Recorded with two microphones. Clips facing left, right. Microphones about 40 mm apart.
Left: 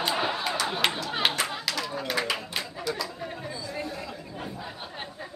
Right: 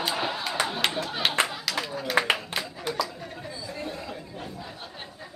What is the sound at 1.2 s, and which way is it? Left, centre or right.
Clapping, centre.